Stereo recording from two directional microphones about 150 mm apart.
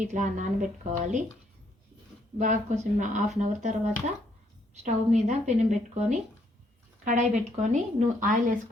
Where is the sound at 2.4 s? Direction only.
55° right (ahead or behind).